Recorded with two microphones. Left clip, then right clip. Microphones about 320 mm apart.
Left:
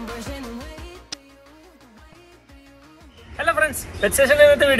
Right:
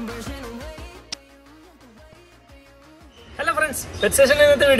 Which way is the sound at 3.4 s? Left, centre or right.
Centre.